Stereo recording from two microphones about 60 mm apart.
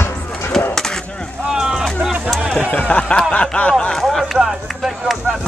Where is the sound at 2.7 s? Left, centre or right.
Left.